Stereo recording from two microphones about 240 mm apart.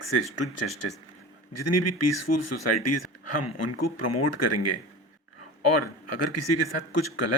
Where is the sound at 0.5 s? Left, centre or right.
Left.